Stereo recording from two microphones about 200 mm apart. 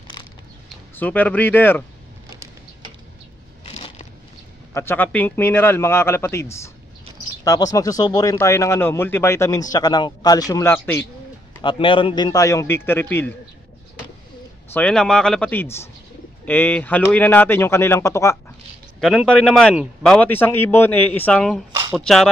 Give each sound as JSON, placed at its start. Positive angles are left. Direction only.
{"t": 0.9, "sound": "speech", "side_deg": 10}
{"t": 3.6, "sound": "a sound", "side_deg": 30}
{"t": 4.7, "sound": "speech", "side_deg": 10}
{"t": 11.6, "sound": "speech", "side_deg": 25}
{"t": 14.7, "sound": "speech", "side_deg": 5}
{"t": 18.9, "sound": "a man's voice", "side_deg": 0}